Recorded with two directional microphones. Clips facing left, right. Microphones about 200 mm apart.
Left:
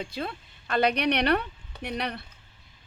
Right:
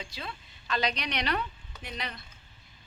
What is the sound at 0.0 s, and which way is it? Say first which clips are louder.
Speech: left 8 dB; 55° left (ahead or behind).